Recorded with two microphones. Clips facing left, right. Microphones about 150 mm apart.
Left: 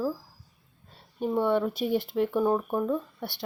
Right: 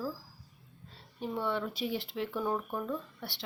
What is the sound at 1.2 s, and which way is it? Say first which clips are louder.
Speech: left 9 dB; 50° left (ahead or behind).